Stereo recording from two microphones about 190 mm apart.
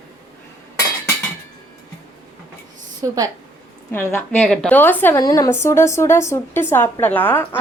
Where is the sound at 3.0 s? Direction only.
15° right (ahead or behind).